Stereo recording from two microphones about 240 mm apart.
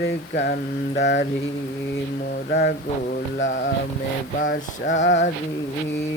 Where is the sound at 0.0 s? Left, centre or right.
Left.